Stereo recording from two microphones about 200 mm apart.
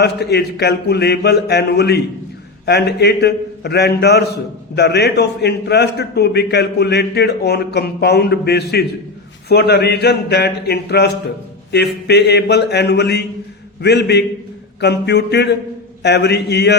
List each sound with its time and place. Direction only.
0.0 s a man's voice: 55° left (ahead or behind)